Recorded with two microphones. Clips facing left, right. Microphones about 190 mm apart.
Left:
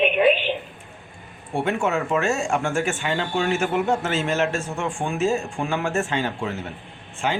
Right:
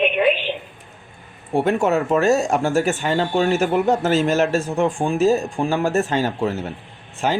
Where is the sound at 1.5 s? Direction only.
40° right (ahead or behind).